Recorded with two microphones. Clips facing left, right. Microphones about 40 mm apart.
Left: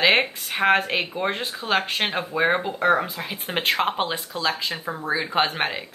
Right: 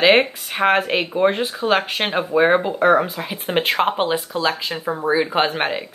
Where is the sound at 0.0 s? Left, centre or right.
Centre.